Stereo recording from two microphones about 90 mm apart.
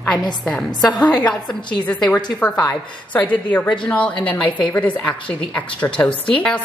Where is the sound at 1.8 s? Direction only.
15° left (ahead or behind).